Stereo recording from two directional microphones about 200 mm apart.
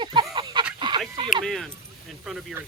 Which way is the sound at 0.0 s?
25° right (ahead or behind).